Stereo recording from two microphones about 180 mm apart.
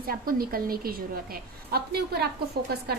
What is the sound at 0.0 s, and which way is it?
A woman's voice, 55° right (ahead or behind).